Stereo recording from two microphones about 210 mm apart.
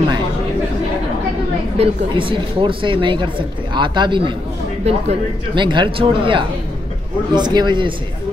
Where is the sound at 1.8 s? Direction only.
25° right (ahead or behind).